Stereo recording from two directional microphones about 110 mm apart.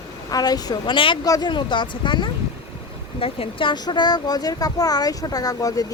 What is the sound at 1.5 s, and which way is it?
A woman's voice, 45° left (ahead or behind).